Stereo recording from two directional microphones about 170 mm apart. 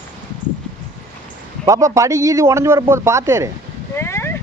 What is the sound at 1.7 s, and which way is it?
Speech, 20° right (ahead or behind).